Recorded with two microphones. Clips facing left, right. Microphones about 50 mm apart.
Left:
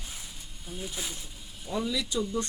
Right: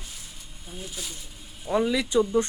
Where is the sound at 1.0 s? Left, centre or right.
Left.